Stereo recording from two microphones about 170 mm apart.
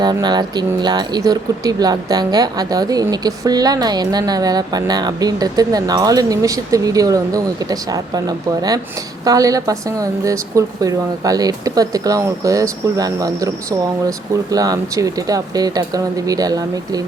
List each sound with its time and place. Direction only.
0.0 s speech: 25° right (ahead or behind)